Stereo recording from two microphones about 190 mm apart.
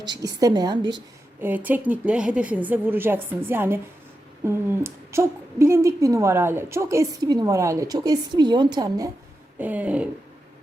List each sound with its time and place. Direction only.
0.0 s a woman's voice: 20° right (ahead or behind)
1.4 s a woman's voice: 10° right (ahead or behind)
9.6 s a woman's voice: 10° right (ahead or behind)